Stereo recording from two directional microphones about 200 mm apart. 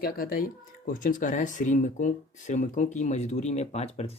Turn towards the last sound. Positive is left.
turn(degrees=30)  # may be behind; listen again after turning